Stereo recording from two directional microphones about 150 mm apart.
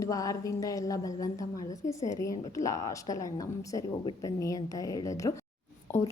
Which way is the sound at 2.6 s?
20° left (ahead or behind).